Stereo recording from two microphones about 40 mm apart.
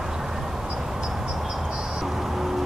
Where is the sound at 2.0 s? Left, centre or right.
Centre.